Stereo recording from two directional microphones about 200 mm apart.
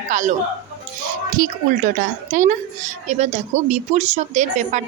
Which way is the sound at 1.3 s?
40° right (ahead or behind).